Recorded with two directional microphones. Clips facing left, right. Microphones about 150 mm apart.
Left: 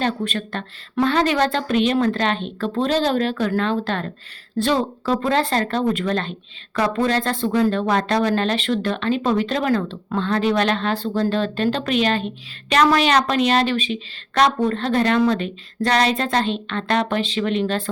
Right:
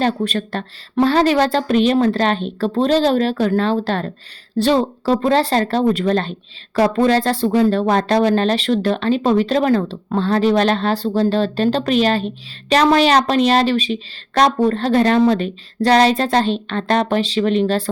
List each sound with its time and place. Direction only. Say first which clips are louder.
0.0 s speech: right 4 dB; 40° right (ahead or behind)